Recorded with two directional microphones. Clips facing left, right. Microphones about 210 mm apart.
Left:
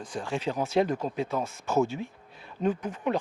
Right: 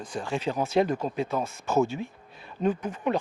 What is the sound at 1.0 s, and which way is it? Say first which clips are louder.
Speech: right 1 dB; 25° right (ahead or behind).